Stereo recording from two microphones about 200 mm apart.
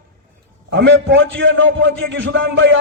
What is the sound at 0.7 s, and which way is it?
A man's voice, 65° right (ahead or behind).